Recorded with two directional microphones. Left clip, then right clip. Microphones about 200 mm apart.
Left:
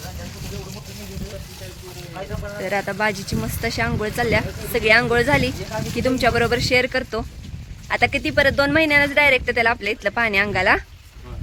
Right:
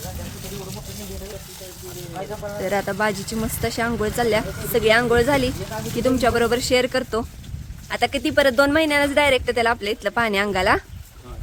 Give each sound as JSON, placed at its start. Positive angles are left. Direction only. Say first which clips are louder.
{"t": 2.6, "sound": "speech", "louder": "even", "side_deg": -10}